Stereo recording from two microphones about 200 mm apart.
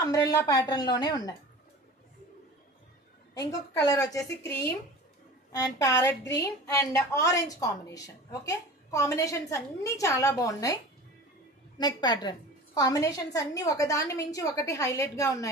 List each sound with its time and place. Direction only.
0.0 s a woman's voice: 15° left (ahead or behind)
3.3 s a woman's voice: 20° left (ahead or behind)
11.8 s a woman's voice: 20° left (ahead or behind)